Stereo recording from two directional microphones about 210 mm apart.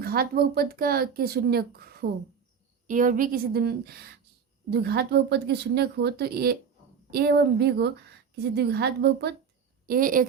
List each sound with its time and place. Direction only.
0.0 s a woman's voice: 45° right (ahead or behind)